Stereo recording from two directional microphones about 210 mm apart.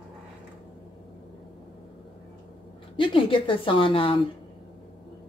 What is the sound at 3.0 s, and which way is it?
A woman's voice, 25° left (ahead or behind).